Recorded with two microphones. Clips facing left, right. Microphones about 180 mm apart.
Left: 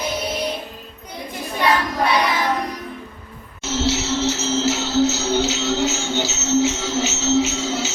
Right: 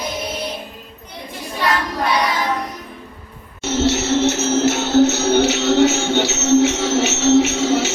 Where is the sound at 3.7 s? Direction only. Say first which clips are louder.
Right 4 dB; 60° right (ahead or behind).